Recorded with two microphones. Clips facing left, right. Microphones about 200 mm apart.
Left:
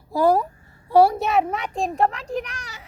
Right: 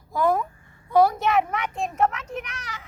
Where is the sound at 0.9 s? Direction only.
30° left (ahead or behind).